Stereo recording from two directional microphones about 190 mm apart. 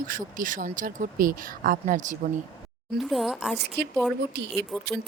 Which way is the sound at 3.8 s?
60° right (ahead or behind).